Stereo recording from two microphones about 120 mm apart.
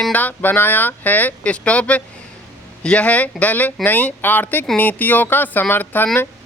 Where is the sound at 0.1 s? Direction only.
15° left (ahead or behind).